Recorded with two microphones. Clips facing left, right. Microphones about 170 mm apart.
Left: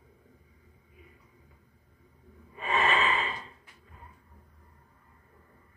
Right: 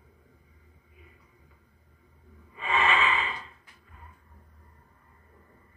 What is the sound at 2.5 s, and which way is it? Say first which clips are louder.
Gasp: right 1 dB; 40° left (ahead or behind).